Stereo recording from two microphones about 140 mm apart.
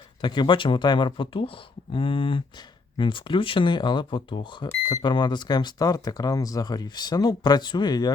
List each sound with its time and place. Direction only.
0.2 s speech: 35° left (ahead or behind)